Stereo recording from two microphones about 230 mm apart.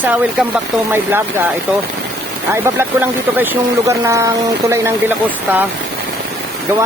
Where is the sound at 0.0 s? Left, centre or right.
Centre.